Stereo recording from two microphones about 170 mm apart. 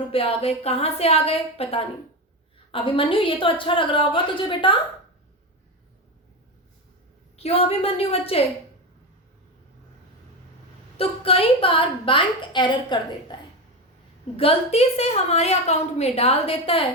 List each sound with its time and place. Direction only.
0.1 s a woman's voice: 35° left (ahead or behind)
7.3 s a woman's voice: 35° left (ahead or behind)
10.9 s a woman's voice: 35° left (ahead or behind)
14.3 s a woman's voice: 35° left (ahead or behind)